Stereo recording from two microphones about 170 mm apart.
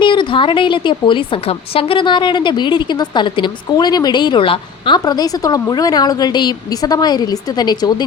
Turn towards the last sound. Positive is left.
turn(degrees=25)  # may be behind; listen again after turning